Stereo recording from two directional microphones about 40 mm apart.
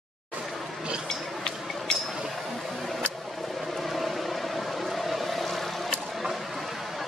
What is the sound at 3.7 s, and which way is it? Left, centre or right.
Vehicle, centre.